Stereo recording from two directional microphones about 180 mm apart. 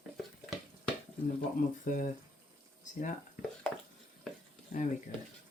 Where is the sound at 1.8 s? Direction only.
50° left (ahead or behind).